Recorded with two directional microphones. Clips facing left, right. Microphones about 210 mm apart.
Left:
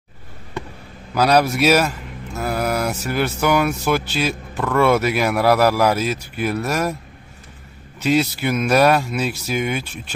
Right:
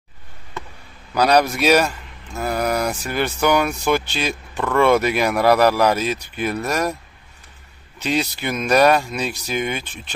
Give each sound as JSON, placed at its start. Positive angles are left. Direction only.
{"t": 1.1, "sound": "a man's voice", "side_deg": 5}
{"t": 8.0, "sound": "speech", "side_deg": 5}